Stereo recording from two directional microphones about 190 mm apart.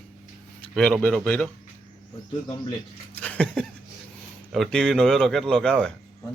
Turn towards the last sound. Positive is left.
turn(degrees=5)  # may be behind; listen again after turning